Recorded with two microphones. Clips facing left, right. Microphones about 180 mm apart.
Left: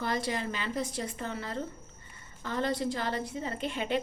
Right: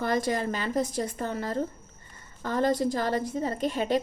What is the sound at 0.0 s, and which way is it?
A woman's voice, 50° right (ahead or behind).